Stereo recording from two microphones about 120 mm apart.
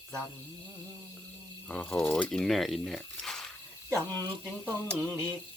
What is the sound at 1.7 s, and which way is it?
Speech, 10° left (ahead or behind).